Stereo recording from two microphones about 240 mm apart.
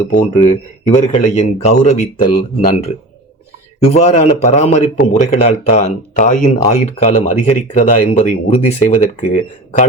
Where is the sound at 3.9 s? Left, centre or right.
Left.